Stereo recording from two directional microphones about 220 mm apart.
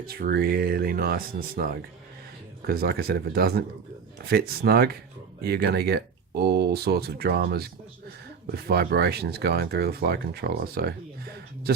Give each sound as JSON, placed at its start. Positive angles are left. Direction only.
{"t": 0.0, "sound": "speech", "side_deg": -45}